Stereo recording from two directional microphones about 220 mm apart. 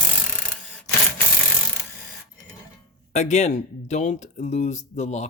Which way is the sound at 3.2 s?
30° left (ahead or behind).